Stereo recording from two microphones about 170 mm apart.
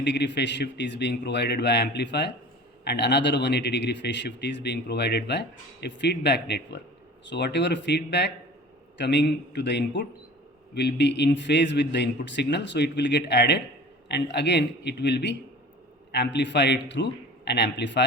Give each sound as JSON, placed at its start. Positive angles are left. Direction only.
{"t": 0.0, "sound": "a man's voice", "side_deg": 90}